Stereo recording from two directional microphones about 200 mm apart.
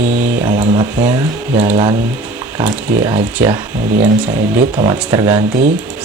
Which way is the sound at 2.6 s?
15° right (ahead or behind).